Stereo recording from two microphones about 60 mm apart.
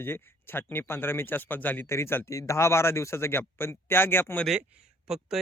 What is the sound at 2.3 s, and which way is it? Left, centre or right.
Speech, left.